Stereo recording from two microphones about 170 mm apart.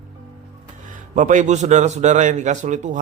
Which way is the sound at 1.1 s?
45° right (ahead or behind).